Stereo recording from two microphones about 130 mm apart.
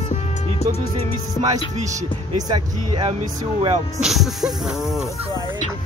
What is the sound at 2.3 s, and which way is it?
Speech, 35° right (ahead or behind).